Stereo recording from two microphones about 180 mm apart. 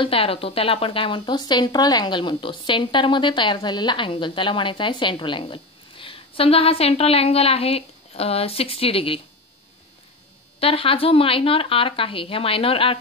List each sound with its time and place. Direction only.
0.0 s speech: 30° left (ahead or behind)
10.6 s speech: 30° left (ahead or behind)